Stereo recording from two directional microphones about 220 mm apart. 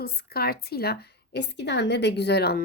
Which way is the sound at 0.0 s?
45° left (ahead or behind).